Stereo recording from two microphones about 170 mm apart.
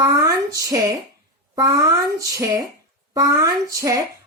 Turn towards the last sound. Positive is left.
turn(degrees=-20)  # may be behind; listen again after turning